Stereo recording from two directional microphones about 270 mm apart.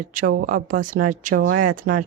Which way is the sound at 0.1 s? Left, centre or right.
Right.